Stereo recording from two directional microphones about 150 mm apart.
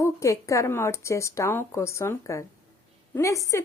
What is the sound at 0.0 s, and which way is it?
A woman's voice, 20° left (ahead or behind).